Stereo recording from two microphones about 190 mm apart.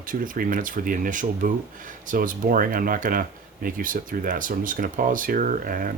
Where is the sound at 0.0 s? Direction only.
45° right (ahead or behind).